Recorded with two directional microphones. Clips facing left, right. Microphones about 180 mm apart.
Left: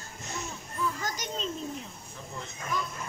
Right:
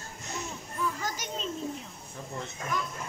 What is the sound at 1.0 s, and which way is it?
Children playing, 10° right (ahead or behind).